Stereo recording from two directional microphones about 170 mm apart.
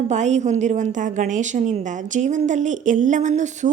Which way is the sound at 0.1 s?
45° right (ahead or behind).